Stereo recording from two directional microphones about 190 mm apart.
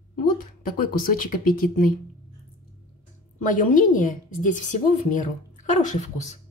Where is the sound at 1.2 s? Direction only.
45° left (ahead or behind).